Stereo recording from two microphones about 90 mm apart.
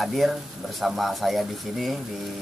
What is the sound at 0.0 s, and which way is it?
Speech, centre (ahead or behind).